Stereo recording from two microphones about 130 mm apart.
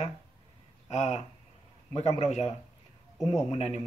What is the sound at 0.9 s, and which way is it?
Speech, 60° left (ahead or behind).